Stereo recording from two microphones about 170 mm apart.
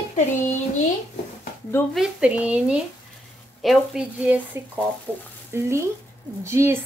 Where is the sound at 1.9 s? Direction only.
5° right (ahead or behind).